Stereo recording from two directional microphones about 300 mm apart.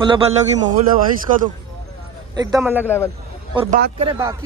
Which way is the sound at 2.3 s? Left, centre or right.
Centre.